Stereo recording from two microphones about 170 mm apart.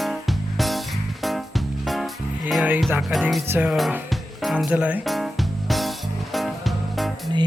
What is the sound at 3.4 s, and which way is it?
Music, 10° right (ahead or behind).